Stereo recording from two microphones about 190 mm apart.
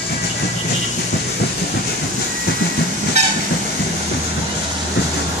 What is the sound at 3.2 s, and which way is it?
Train, 35° right (ahead or behind).